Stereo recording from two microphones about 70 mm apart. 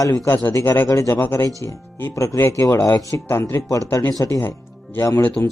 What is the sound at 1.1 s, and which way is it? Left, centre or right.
Speech, left.